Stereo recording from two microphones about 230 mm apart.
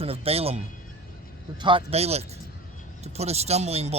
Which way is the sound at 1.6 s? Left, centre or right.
Right.